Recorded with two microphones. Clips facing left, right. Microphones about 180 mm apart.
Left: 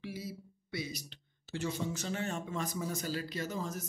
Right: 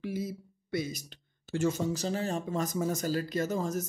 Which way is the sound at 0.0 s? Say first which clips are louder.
Right 7 dB; 50° right (ahead or behind).